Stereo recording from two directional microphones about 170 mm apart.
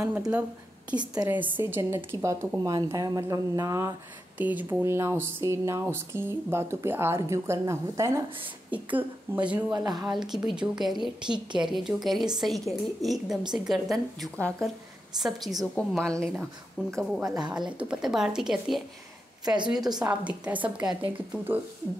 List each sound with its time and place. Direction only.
0.3 s a woman's voice: 5° right (ahead or behind)
9.8 s a woman's voice: 25° right (ahead or behind)
10.3 s a woman's voice: 5° right (ahead or behind)
11.2 s a woman's voice: 25° right (ahead or behind)
11.7 s a woman's voice: centre (ahead or behind)
17.3 s a woman's voice: 25° right (ahead or behind)
17.6 s a woman's voice: 5° right (ahead or behind)
19.4 s a woman's voice: 25° right (ahead or behind)
20.1 s speech: 5° right (ahead or behind)